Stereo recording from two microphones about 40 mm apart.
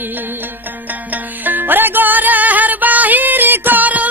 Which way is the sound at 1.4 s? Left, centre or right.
Right.